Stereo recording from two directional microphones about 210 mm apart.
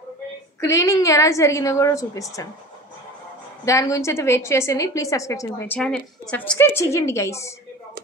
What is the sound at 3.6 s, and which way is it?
A woman's voice, 15° left (ahead or behind).